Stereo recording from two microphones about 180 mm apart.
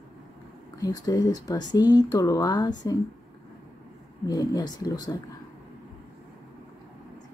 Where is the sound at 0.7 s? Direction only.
20° left (ahead or behind).